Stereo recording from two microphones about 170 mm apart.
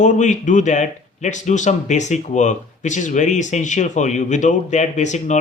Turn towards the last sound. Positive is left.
turn(degrees=45)  # may be behind; listen again after turning